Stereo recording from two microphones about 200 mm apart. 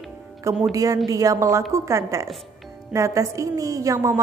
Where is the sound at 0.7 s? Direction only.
15° right (ahead or behind).